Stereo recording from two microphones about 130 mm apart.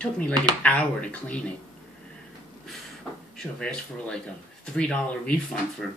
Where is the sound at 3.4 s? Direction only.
5° left (ahead or behind).